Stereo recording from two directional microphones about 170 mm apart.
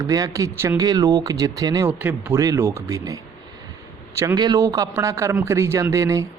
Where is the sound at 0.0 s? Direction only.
20° right (ahead or behind).